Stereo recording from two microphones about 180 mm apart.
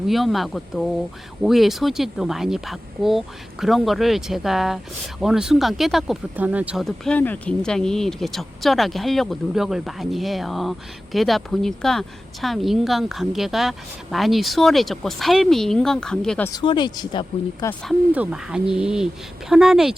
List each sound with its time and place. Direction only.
0.1 s speech: centre (ahead or behind)
16.5 s speech: 25° left (ahead or behind)
18.1 s speech: 5° right (ahead or behind)